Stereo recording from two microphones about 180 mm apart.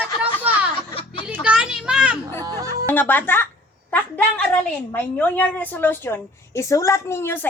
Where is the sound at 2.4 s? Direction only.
20° right (ahead or behind).